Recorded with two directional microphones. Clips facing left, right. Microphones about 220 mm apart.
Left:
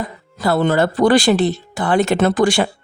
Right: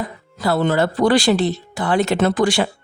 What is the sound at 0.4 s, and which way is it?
Speech, 50° left (ahead or behind).